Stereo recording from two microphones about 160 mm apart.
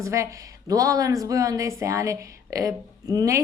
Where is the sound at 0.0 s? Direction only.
20° right (ahead or behind).